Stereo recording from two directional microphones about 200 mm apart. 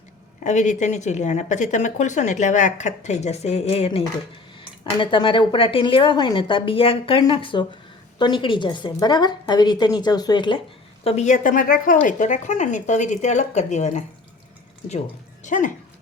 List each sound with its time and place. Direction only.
0.4 s speech: 35° left (ahead or behind)
11.0 s speech: 35° left (ahead or behind)
15.4 s speech: 40° left (ahead or behind)